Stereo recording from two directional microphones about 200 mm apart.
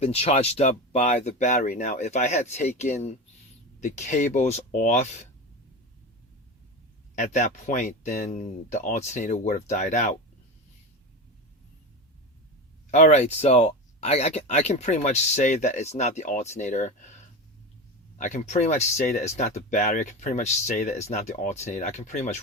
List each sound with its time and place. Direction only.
0.0 s speech: 30° left (ahead or behind)
7.2 s speech: 35° left (ahead or behind)
12.9 s speech: 35° left (ahead or behind)
18.2 s speech: 35° left (ahead or behind)